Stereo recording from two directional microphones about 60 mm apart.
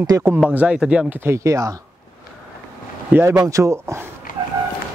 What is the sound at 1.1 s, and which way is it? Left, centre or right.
Speech, right.